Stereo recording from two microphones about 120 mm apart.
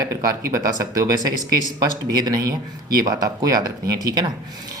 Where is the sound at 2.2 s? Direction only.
30° right (ahead or behind).